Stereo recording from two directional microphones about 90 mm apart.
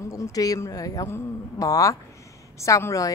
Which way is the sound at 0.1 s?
40° left (ahead or behind).